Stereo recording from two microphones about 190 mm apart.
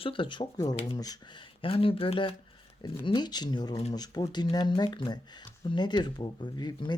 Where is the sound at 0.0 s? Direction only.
25° left (ahead or behind).